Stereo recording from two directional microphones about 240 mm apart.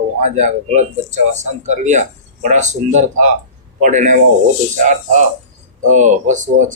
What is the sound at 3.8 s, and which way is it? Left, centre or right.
Speech, right.